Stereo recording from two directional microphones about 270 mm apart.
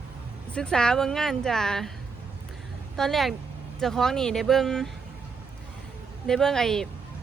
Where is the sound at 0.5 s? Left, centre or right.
Centre.